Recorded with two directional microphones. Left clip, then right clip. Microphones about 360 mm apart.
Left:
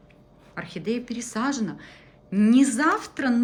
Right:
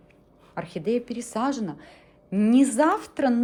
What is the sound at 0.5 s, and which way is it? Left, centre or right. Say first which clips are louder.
A woman's voice: right 3 dB; centre.